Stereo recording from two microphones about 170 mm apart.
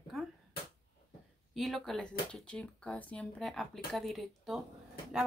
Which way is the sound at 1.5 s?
Centre (ahead or behind).